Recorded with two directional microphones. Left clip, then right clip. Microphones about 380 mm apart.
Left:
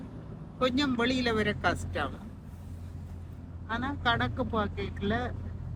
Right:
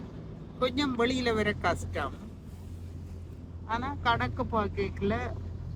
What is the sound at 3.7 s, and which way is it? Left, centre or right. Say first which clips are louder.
Speech: right 1 dB; centre.